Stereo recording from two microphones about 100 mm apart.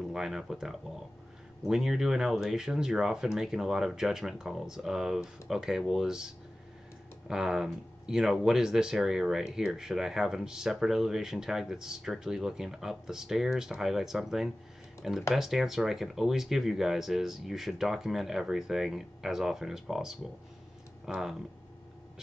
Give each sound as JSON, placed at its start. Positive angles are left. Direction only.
{"t": 0.1, "sound": "speech", "side_deg": -5}